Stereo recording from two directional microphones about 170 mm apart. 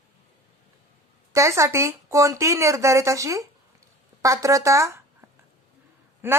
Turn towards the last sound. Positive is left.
turn(degrees=-15)  # may be behind; listen again after turning